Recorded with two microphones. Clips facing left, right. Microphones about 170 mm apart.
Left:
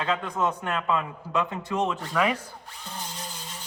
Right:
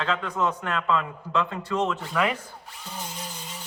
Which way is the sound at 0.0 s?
15° left (ahead or behind).